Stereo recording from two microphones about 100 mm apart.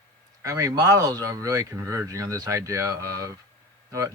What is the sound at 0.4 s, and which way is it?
A man's voice, 35° right (ahead or behind).